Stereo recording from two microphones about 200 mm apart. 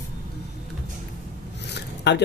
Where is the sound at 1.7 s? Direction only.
55° left (ahead or behind).